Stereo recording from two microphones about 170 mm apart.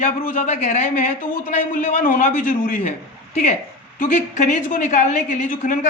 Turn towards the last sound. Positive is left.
turn(degrees=50)  # may be behind; listen again after turning